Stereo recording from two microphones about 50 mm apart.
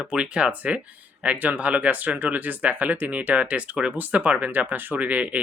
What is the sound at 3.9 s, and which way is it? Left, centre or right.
Speech, right.